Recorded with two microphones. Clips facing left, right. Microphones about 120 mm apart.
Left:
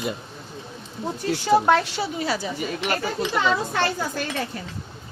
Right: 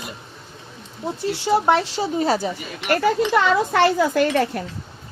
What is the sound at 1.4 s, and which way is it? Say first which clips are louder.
Speech: even; 25° right (ahead or behind).